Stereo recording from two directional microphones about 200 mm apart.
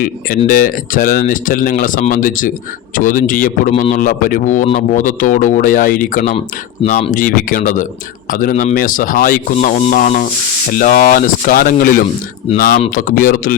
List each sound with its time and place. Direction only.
0.4 s a man's voice: 45° left (ahead or behind)